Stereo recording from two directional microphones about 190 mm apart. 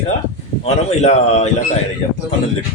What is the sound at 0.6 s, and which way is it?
Speech, 35° left (ahead or behind).